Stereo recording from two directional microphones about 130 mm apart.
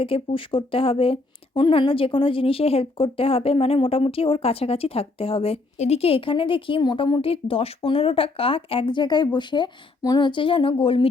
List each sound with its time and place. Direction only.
0.0 s speech: 45° left (ahead or behind)